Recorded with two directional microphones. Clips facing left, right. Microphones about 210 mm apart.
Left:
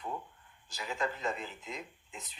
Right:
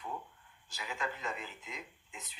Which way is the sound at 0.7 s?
35° left (ahead or behind).